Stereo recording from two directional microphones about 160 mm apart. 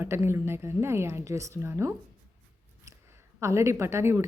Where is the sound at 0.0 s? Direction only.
15° right (ahead or behind).